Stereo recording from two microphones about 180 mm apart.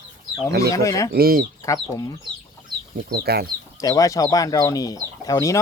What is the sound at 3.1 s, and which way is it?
Speech, 60° right (ahead or behind).